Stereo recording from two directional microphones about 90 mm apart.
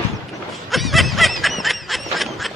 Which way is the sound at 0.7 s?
Centre (ahead or behind).